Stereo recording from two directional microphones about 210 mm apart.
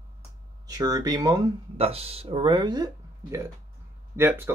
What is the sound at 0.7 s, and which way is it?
Speech, 15° right (ahead or behind).